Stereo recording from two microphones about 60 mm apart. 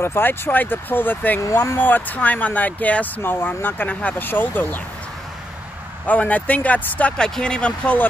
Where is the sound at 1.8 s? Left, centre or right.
Left.